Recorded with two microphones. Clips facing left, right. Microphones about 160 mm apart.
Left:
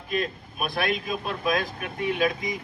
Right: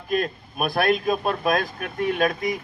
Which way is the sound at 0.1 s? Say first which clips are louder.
Right 4 dB; 50° right (ahead or behind).